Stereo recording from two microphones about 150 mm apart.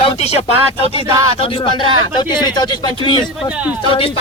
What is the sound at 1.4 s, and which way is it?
Speech, 35° left (ahead or behind).